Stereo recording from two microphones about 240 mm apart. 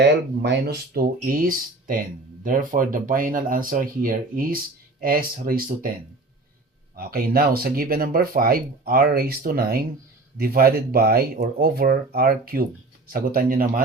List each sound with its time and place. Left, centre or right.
0.0 s speech: right
6.9 s speech: right